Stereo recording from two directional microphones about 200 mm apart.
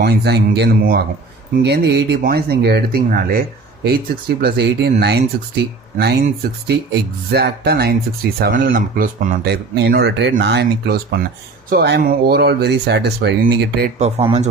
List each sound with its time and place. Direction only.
0.0 s speech: 55° right (ahead or behind)
6.2 s speech: 50° right (ahead or behind)
14.0 s speech: 30° right (ahead or behind)